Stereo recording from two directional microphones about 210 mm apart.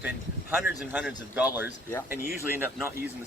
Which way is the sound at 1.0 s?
5° right (ahead or behind).